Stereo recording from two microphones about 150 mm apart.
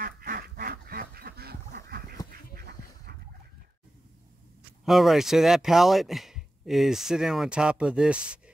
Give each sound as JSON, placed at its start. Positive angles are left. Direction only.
{"t": 0.0, "sound": "duck", "side_deg": -80}
{"t": 4.8, "sound": "speech", "side_deg": 0}